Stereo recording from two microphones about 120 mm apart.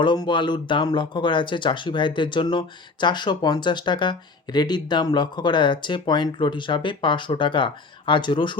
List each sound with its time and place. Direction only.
0.0 s speech: 40° left (ahead or behind)